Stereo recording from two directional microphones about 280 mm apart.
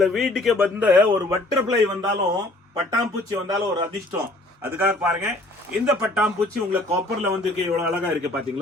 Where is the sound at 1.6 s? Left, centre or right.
Centre.